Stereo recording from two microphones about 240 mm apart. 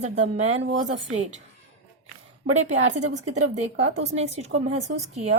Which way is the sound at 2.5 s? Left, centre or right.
Right.